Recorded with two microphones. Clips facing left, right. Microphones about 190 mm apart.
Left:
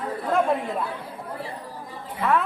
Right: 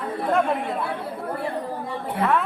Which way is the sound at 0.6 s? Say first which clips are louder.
Right 2 dB; 70° right (ahead or behind).